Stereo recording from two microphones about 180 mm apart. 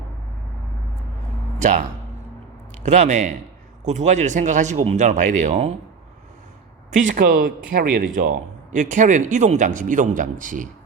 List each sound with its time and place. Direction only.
1.5 s speech: 40° right (ahead or behind)
2.8 s speech: 40° right (ahead or behind)
6.9 s speech: 45° right (ahead or behind)
8.7 s speech: 45° right (ahead or behind)